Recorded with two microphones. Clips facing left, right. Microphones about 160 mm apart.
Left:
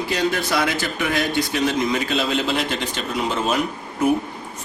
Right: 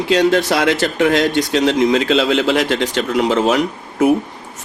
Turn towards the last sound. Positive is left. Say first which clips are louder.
# right 5 dB
turn(degrees=-80)